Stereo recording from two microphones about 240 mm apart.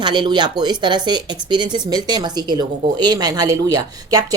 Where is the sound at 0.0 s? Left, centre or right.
Centre.